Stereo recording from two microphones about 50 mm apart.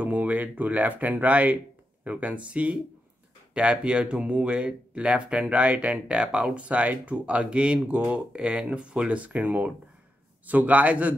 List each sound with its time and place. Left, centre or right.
0.0 s speech: right